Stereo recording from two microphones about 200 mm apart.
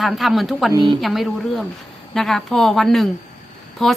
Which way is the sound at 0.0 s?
Centre (ahead or behind).